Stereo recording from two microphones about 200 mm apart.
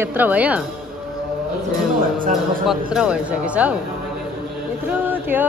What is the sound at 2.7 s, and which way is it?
Speech, 5° right (ahead or behind).